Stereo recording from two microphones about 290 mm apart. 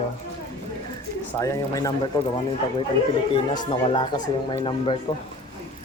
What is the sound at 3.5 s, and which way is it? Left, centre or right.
Speech, centre.